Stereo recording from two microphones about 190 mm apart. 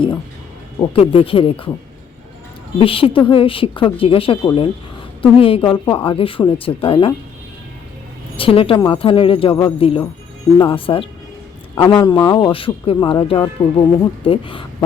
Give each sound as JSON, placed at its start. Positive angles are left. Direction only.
{"t": 0.8, "sound": "a man's voice", "side_deg": 30}
{"t": 2.7, "sound": "a man's voice", "side_deg": 30}
{"t": 8.4, "sound": "a man's voice", "side_deg": 30}